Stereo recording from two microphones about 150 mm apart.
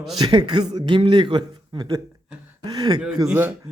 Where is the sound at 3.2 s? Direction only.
15° right (ahead or behind).